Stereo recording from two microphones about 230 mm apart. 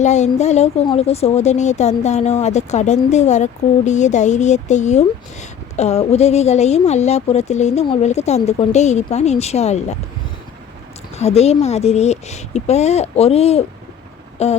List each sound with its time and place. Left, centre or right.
0.0 s speech: left
11.1 s speech: left